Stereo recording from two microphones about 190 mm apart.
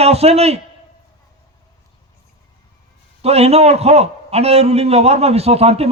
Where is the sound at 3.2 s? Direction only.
35° right (ahead or behind).